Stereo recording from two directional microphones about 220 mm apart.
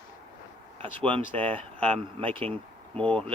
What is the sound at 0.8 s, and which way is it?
Speech, 25° right (ahead or behind).